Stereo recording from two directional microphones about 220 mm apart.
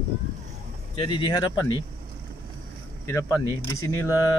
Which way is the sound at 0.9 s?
20° left (ahead or behind).